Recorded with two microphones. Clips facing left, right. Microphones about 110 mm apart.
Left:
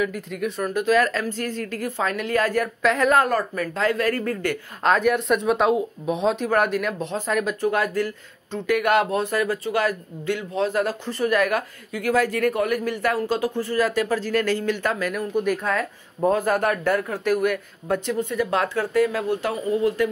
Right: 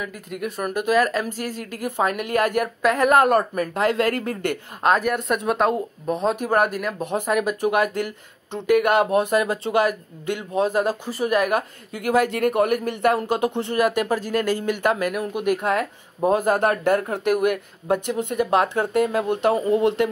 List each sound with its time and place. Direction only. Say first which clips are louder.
0.3 s speech: left 1 dB; 5° right (ahead or behind); by 4.4 s 20° right (ahead or behind)
4.8 s speech: left 1 dB; 5° right (ahead or behind)
18.1 s speech: even; 65° right (ahead or behind)
18.4 s speech: right 5 dB; 20° right (ahead or behind)